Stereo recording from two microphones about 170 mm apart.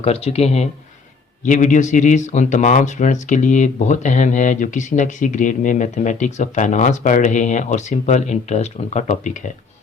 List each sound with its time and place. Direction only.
0.0 s speech: 35° left (ahead or behind)